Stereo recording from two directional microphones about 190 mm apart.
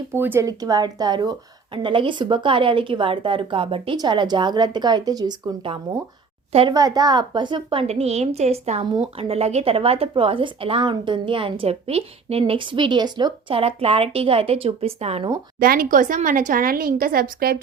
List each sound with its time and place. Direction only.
0.1 s speech: 10° right (ahead or behind)
6.5 s a child's voice: 30° right (ahead or behind)
6.7 s speech: 20° right (ahead or behind)
15.5 s speech: 50° right (ahead or behind)